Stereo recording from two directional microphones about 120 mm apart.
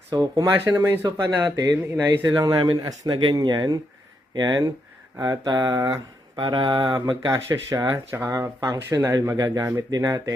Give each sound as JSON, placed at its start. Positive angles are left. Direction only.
{"t": 0.1, "sound": "mantra", "side_deg": -35}
{"t": 0.5, "sound": "speech", "side_deg": -20}
{"t": 1.0, "sound": "mantra", "side_deg": -35}
{"t": 6.3, "sound": "mantra", "side_deg": -45}
{"t": 7.3, "sound": "speech", "side_deg": -25}